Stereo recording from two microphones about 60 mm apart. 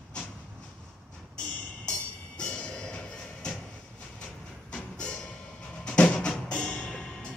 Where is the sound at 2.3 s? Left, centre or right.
Centre.